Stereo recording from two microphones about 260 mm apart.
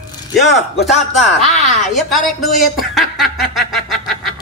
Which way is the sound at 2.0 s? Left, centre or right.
Centre.